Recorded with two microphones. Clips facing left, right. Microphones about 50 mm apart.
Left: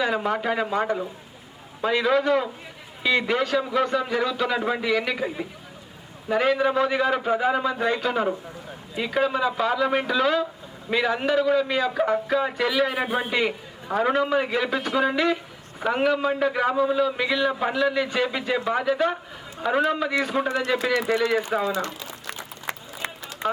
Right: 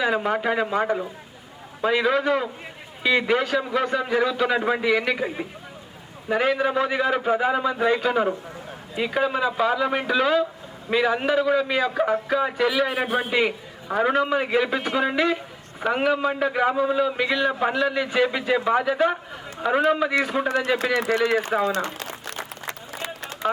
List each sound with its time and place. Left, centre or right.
0.0 s a man's voice: centre